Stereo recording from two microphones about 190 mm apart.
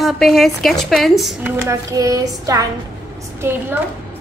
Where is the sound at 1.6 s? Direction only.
15° right (ahead or behind).